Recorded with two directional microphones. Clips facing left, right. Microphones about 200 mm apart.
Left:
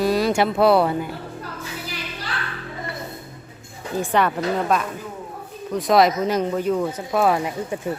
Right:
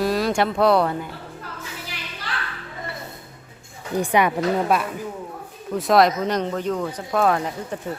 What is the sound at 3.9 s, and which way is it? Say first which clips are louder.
Speech: right 1 dB; 15° right (ahead or behind).